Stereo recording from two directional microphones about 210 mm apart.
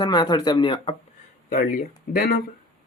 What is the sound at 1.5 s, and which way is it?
Speech, 40° left (ahead or behind).